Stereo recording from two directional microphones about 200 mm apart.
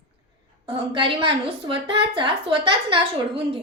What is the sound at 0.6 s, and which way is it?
A woman's voice, 25° right (ahead or behind).